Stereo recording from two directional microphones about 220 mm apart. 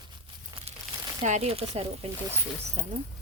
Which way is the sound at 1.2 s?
30° right (ahead or behind).